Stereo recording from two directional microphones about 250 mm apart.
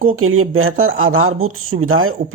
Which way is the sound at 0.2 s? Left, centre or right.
Right.